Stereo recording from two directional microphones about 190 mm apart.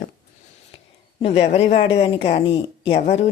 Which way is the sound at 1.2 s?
30° left (ahead or behind).